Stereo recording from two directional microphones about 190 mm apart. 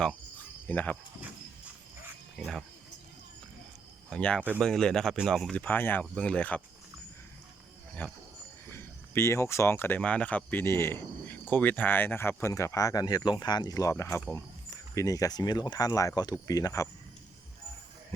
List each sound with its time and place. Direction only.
0.7 s speech: 10° left (ahead or behind)
2.3 s speech: centre (ahead or behind)
4.1 s speech: 5° left (ahead or behind)
8.0 s speech: 10° left (ahead or behind)